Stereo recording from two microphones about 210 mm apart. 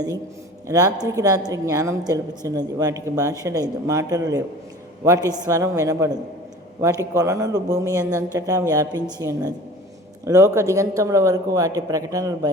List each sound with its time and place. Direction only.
0.7 s a woman's voice: 15° right (ahead or behind)